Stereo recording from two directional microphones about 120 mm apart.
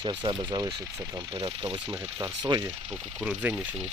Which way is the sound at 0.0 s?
40° right (ahead or behind).